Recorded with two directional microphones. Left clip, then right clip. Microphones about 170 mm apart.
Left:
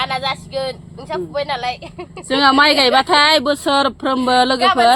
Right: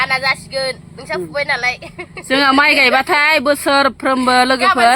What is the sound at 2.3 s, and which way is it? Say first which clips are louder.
Speech: right 1 dB; 35° right (ahead or behind).